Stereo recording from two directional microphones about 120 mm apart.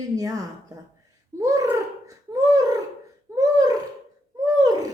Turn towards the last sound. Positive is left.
turn(degrees=-30)  # may be behind; listen again after turning